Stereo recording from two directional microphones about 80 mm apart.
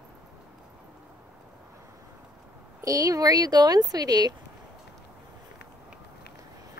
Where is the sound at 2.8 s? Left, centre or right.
Right.